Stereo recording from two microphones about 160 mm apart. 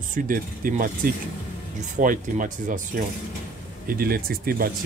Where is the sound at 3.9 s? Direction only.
65° right (ahead or behind).